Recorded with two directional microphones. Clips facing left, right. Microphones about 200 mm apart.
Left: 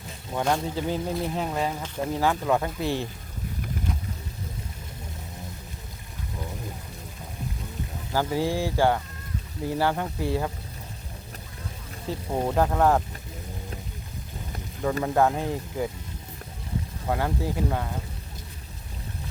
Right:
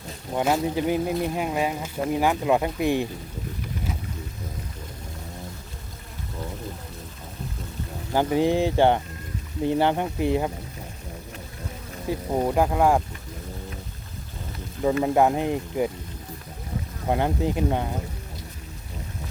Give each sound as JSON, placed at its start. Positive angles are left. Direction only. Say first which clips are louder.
{"t": 0.4, "sound": "speech", "louder": "right 3 dB", "side_deg": -10}
{"t": 8.1, "sound": "speech", "louder": "right 5 dB", "side_deg": -20}
{"t": 12.0, "sound": "speech", "louder": "right 3 dB", "side_deg": -10}
{"t": 15.0, "sound": "speech", "louder": "right 1 dB", "side_deg": -15}
{"t": 17.1, "sound": "speech", "louder": "right 4 dB", "side_deg": -20}